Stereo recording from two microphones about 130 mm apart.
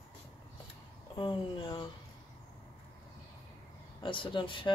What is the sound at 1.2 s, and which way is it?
Speech, 40° left (ahead or behind).